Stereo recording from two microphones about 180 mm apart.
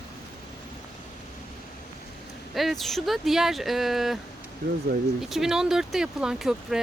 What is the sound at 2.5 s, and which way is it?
Speech, centre (ahead or behind).